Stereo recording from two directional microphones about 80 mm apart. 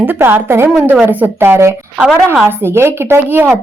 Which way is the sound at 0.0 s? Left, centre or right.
Right.